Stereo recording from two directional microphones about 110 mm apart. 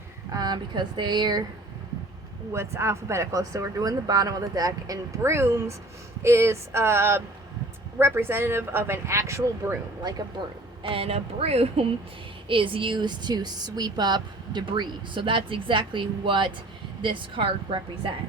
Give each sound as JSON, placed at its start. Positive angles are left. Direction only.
{"t": 0.3, "sound": "speech", "side_deg": -40}
{"t": 2.5, "sound": "speech", "side_deg": -25}
{"t": 10.0, "sound": "speech", "side_deg": -35}
{"t": 10.8, "sound": "speech", "side_deg": -60}
{"t": 12.5, "sound": "a woman's voice", "side_deg": -50}